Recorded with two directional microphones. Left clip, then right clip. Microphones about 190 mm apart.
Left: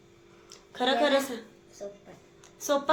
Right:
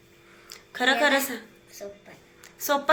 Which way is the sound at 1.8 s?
20° left (ahead or behind).